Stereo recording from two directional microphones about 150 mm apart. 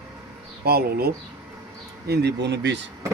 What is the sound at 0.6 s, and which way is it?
Speech, 90° right.